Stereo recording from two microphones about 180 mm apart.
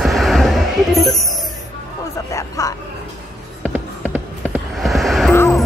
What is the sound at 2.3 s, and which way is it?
Hubbub, 20° left (ahead or behind).